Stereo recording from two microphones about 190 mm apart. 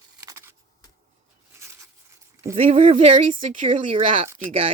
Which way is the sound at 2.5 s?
30° right (ahead or behind).